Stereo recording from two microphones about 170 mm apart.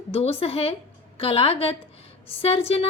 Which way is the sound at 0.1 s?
35° left (ahead or behind).